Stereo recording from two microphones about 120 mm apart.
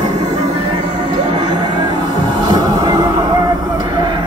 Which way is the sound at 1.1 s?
40° right (ahead or behind).